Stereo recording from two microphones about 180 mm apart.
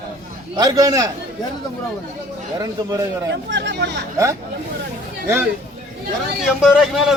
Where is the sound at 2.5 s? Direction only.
20° right (ahead or behind).